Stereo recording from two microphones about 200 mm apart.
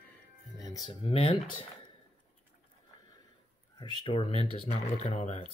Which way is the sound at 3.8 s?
25° left (ahead or behind).